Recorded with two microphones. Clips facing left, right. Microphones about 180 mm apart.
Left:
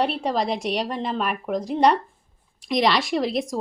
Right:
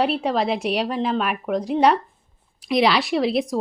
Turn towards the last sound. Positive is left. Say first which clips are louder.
# right 3 dB
turn(degrees=0)  # may be behind; listen again after turning